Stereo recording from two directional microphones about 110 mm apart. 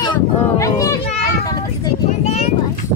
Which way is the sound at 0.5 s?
30° left (ahead or behind).